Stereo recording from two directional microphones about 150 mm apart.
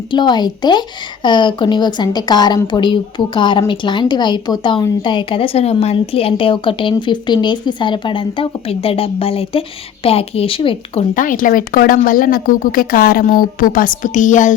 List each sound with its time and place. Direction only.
0.1 s a woman's voice: 30° left (ahead or behind)
11.1 s speech: 65° left (ahead or behind)